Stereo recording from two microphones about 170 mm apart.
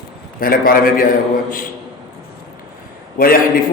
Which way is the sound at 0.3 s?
55° left (ahead or behind).